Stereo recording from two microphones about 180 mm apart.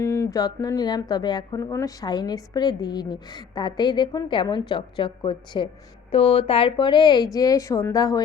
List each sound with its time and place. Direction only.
0.0 s speech: 15° left (ahead or behind)